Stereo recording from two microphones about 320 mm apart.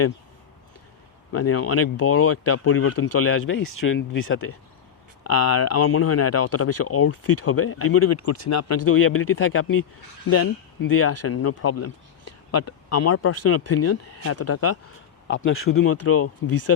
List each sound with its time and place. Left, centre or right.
1.3 s speech: left
10.9 s speech: left